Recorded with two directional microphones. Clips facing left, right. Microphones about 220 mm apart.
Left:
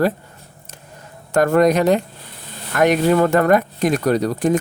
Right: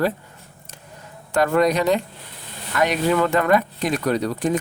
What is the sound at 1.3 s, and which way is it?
Speech, 45° left (ahead or behind).